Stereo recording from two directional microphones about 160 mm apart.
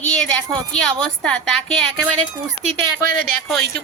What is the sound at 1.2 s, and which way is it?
Speech, 5° left (ahead or behind).